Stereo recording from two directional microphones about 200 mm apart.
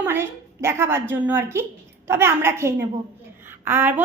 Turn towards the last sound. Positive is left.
turn(degrees=-10)  # may be behind; listen again after turning